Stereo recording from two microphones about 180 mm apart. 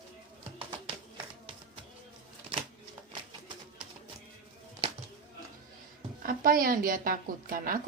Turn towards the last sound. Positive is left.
turn(degrees=-50)  # may be behind; listen again after turning